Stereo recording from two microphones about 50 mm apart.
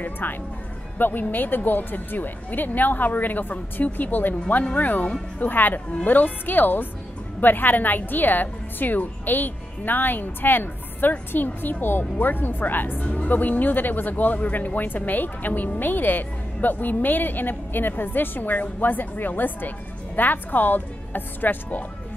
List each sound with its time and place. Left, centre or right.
0.0 s speech: left
13.0 s speech: left